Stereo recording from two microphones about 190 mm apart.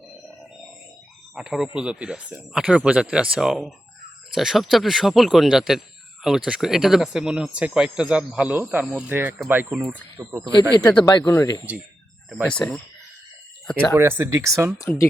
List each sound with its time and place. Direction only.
1.4 s speech: centre (ahead or behind); by 10.8 s 20° right (ahead or behind)
11.2 s speech: 15° left (ahead or behind)
12.3 s speech: centre (ahead or behind)
13.9 s speech: 10° right (ahead or behind)
14.8 s speech: 15° left (ahead or behind)